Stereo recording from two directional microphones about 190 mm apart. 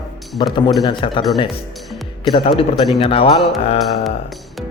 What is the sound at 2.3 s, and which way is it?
A man's voice, 30° left (ahead or behind).